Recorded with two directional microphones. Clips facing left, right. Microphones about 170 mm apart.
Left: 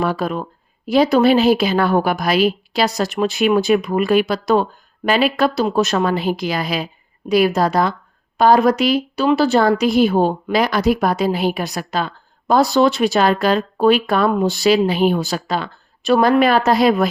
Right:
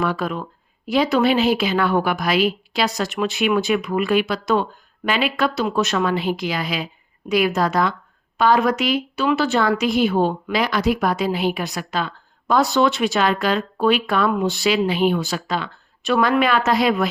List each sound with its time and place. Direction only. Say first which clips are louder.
0.0 s a woman's voice: left 3 dB; 35° left (ahead or behind)